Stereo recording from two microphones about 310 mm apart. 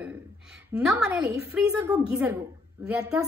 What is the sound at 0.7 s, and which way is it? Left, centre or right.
A woman's voice, centre.